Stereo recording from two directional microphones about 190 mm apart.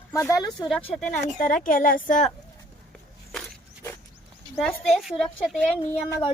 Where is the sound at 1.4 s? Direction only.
45° left (ahead or behind).